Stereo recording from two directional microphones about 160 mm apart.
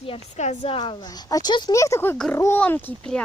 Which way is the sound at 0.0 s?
40° left (ahead or behind).